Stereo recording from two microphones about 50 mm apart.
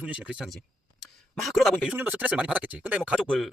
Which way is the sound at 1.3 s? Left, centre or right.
Centre.